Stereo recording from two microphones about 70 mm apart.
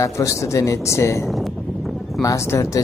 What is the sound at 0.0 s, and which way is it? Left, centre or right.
Speech, left.